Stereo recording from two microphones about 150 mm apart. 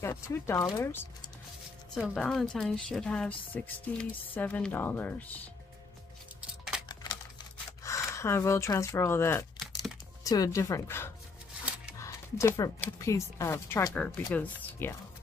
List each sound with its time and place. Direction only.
0.0 s speech: 15° left (ahead or behind)
2.0 s a woman's voice: 5° left (ahead or behind)
6.9 s a sound: 25° left (ahead or behind)
7.8 s speech: 20° left (ahead or behind)